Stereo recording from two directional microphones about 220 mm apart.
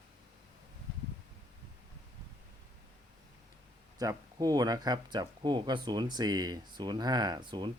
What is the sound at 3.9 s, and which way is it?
Speech, 15° right (ahead or behind).